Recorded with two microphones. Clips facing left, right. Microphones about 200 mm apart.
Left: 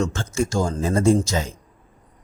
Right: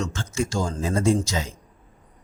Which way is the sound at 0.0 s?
50° left (ahead or behind).